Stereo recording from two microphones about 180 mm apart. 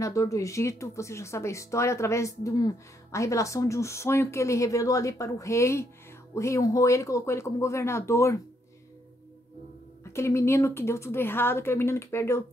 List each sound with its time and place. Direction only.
0.0 s speech: 15° left (ahead or behind)
10.1 s speech: 15° left (ahead or behind)